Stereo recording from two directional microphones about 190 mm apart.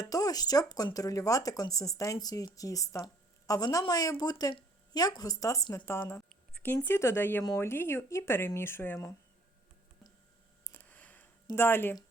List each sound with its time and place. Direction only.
0.0 s speech: 20° left (ahead or behind)
10.6 s a sound: 10° left (ahead or behind)
11.4 s speech: 10° left (ahead or behind)